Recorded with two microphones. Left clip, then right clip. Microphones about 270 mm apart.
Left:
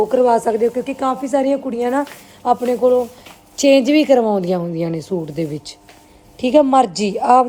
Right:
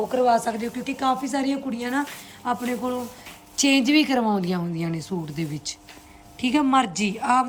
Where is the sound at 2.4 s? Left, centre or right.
Centre.